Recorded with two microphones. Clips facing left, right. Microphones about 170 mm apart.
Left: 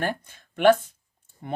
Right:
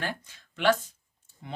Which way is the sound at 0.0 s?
50° left (ahead or behind).